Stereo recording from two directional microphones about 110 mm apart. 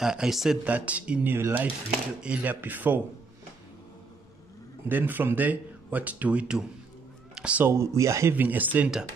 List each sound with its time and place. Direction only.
0.0 s speech: 5° right (ahead or behind)
4.8 s speech: 15° right (ahead or behind)
7.7 s speech: 25° right (ahead or behind)